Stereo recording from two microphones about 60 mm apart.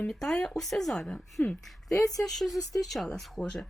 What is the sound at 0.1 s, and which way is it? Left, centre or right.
Speech, centre.